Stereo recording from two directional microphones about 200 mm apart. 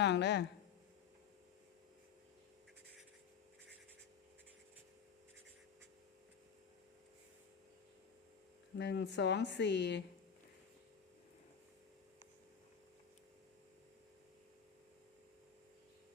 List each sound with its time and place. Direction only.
0.0 s speech: 60° left (ahead or behind)
8.8 s a woman's voice: 60° left (ahead or behind)